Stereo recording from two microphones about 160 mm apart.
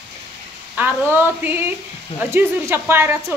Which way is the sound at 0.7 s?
15° right (ahead or behind).